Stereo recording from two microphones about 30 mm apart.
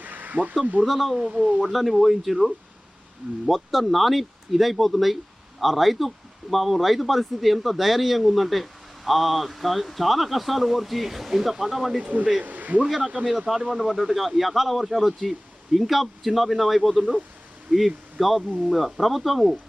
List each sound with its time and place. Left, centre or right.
0.0 s a sound: right
0.6 s speech: right
0.9 s speech: centre
1.2 s speech: right
1.6 s speech: centre
12.0 s speech: right
13.7 s speech: centre